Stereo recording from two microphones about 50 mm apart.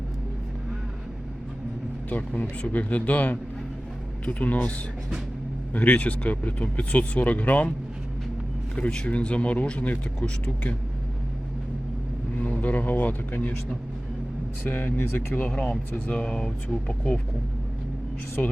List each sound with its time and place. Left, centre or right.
2.0 s speech: left
5.7 s speech: left
8.7 s speech: centre
12.4 s a sound: centre
12.6 s speech: left
14.6 s speech: left
15.4 s speech: centre
18.4 s speech: left